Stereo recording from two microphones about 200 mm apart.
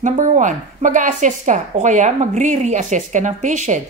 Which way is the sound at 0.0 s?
40° right (ahead or behind).